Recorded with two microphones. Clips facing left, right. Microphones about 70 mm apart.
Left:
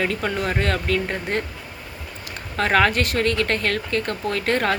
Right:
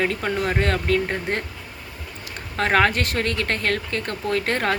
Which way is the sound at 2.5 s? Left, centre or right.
Right.